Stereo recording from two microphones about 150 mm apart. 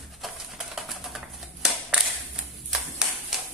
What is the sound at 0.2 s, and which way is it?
Typewriter, centre (ahead or behind).